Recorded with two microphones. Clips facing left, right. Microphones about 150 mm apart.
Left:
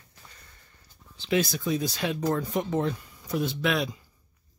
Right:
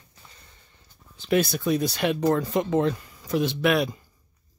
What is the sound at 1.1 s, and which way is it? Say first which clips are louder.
Speech: right 3 dB; 50° right (ahead or behind).